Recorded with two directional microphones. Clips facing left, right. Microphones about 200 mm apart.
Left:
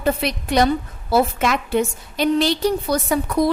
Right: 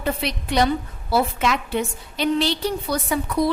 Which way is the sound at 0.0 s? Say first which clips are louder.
Left 4 dB; 45° left (ahead or behind).